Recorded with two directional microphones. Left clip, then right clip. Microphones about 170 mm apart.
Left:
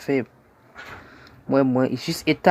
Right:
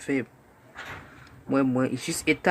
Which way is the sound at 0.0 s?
35° left (ahead or behind).